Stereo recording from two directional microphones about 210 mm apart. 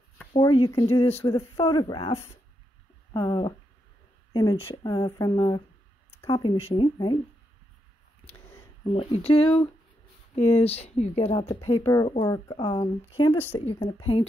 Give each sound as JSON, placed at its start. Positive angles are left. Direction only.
{"t": 0.3, "sound": "speech", "side_deg": 25}
{"t": 8.9, "sound": "speech", "side_deg": 25}
{"t": 11.8, "sound": "speech", "side_deg": 20}